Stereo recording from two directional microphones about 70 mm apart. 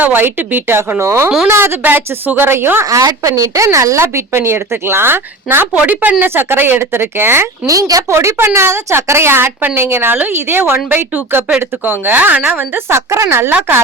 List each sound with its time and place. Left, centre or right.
0.0 s a woman's voice: right
0.8 s a woman's voice: right
1.8 s a woman's voice: right
2.9 s a woman's voice: right
7.7 s a woman's voice: right
8.1 s a woman's voice: right
9.6 s a woman's voice: right